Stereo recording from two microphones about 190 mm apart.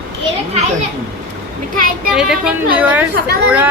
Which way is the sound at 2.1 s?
5° right (ahead or behind).